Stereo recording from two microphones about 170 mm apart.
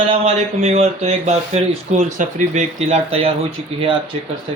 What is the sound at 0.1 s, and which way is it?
Speech, 40° right (ahead or behind).